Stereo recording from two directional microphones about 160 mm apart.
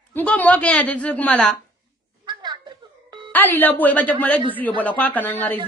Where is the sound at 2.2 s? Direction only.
25° right (ahead or behind).